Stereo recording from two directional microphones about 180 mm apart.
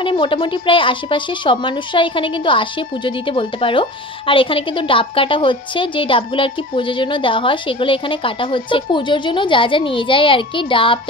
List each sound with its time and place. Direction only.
0.0 s a woman's voice: 30° left (ahead or behind)